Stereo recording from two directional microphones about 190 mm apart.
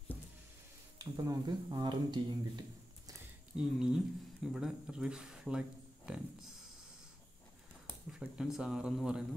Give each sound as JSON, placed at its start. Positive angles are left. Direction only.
{"t": 0.9, "sound": "speech", "side_deg": -20}
{"t": 3.5, "sound": "speech", "side_deg": -5}
{"t": 8.1, "sound": "speech", "side_deg": -5}